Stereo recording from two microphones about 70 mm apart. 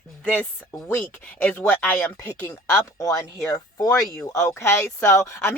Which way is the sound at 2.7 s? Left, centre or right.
Left.